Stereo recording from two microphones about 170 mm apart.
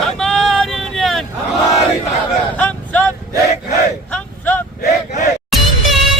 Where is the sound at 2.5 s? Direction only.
10° left (ahead or behind).